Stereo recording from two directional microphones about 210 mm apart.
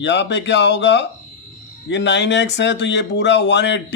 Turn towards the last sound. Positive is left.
turn(degrees=55)  # may be behind; listen again after turning